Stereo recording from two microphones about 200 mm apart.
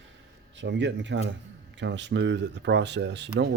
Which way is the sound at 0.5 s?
65° right (ahead or behind).